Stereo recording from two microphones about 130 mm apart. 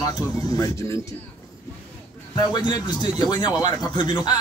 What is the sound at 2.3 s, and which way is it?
Speech, 30° left (ahead or behind).